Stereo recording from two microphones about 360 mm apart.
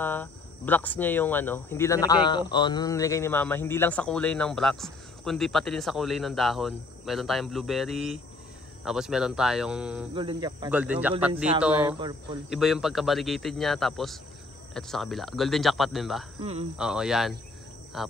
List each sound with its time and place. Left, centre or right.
0.0 s speech: centre
12.4 s speech: centre
16.3 s speech: centre
16.7 s speech: centre